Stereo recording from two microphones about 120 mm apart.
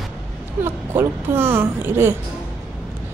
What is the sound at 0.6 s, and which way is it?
Speech, 20° right (ahead or behind).